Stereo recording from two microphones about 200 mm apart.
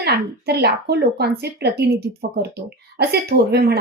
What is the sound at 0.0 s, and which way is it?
A woman's voice, 55° right (ahead or behind).